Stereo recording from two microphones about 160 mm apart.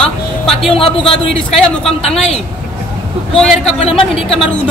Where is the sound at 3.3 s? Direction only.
5° left (ahead or behind).